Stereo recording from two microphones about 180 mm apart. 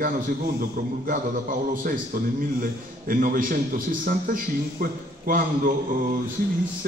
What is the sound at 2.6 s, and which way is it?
A man's voice, 50° right (ahead or behind).